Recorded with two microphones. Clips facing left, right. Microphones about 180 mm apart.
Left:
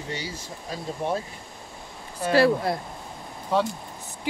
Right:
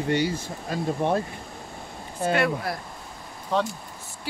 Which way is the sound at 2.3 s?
30° left (ahead or behind).